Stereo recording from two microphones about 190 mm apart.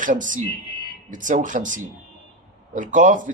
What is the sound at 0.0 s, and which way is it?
Speech, 45° right (ahead or behind).